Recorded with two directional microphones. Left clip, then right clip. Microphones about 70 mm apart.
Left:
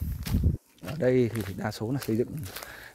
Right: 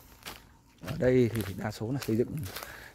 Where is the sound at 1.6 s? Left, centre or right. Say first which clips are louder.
Left 7 dB; left.